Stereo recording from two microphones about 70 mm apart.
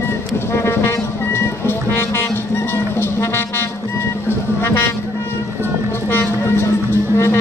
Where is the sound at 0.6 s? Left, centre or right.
Left.